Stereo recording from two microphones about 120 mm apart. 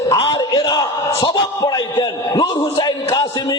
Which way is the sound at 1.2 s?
35° left (ahead or behind).